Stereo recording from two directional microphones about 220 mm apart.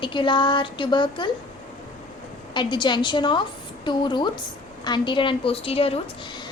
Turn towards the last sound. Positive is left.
turn(degrees=25)  # may be behind; listen again after turning